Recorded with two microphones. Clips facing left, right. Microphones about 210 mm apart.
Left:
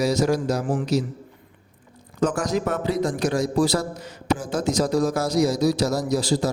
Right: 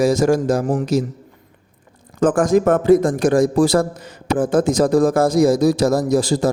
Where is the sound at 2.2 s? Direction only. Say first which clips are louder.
Right 8 dB; 50° right (ahead or behind).